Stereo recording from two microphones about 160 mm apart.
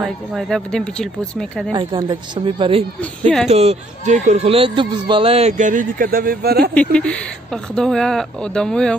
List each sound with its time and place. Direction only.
0.0 s speech: centre (ahead or behind)
1.7 s speech: 30° right (ahead or behind)
3.0 s speech: 5° left (ahead or behind)
3.4 s speech: 40° right (ahead or behind); by 6.7 s 75° right (ahead or behind)
6.7 s speech: 5° left (ahead or behind)